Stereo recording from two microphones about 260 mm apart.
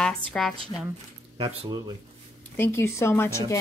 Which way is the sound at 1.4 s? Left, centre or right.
Centre.